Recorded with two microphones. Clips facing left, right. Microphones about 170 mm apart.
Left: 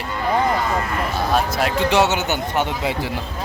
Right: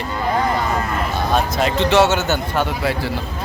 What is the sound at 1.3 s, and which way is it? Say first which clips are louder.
A man's voice: right 2 dB; 5° left (ahead or behind).